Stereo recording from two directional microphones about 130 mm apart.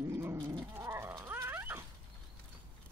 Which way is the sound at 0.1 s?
20° right (ahead or behind).